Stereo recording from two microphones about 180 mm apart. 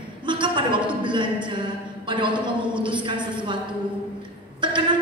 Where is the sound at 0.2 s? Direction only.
25° right (ahead or behind).